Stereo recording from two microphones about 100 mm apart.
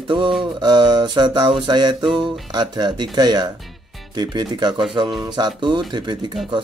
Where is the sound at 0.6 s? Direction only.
45° right (ahead or behind).